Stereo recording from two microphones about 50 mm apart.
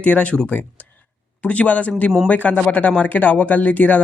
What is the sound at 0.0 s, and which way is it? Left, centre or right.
Speech, left.